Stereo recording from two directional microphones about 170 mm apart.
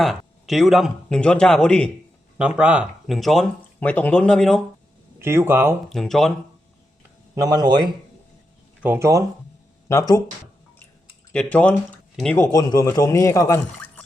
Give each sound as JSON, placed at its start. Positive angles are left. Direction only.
{"t": 0.0, "sound": "speech", "side_deg": 0}
{"t": 2.4, "sound": "speech", "side_deg": -5}
{"t": 5.2, "sound": "speech", "side_deg": -15}
{"t": 5.9, "sound": "speech", "side_deg": 0}
{"t": 7.3, "sound": "speech", "side_deg": -20}
{"t": 9.9, "sound": "a man's voice", "side_deg": 20}
{"t": 11.3, "sound": "speech", "side_deg": 10}
{"t": 12.4, "sound": "a man's voice", "side_deg": 20}